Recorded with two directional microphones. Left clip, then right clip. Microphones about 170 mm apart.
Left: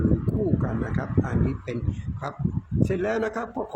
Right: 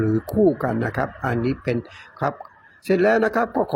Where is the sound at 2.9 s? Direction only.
30° right (ahead or behind).